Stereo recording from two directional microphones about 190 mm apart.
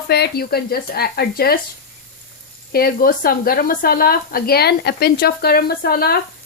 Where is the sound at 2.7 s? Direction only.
50° left (ahead or behind).